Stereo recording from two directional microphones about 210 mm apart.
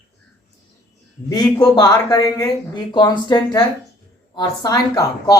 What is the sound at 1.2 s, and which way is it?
Speech, 20° left (ahead or behind).